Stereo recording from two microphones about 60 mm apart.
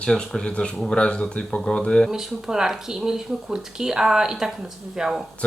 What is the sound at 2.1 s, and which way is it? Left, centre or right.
Speech, centre.